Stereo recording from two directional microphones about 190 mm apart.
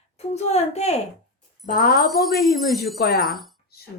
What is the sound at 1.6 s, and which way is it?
Speech, 50° left (ahead or behind).